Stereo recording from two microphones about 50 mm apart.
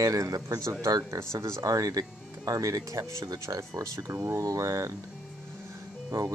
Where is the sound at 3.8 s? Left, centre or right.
Right.